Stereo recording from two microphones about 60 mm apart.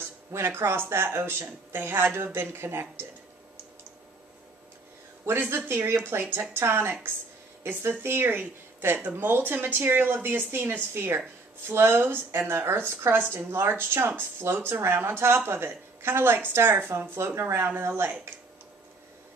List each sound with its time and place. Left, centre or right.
0.3 s speech: right
5.2 s speech: right
17.6 s speech: right